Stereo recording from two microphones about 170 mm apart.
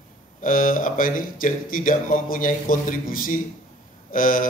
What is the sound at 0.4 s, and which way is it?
A man's voice, 55° left (ahead or behind).